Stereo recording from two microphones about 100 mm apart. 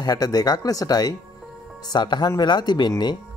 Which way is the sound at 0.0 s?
40° left (ahead or behind).